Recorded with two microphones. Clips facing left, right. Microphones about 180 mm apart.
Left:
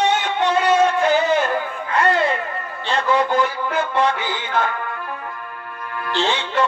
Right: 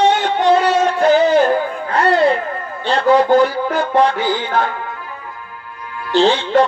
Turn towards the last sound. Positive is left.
turn(degrees=-35)  # may be behind; listen again after turning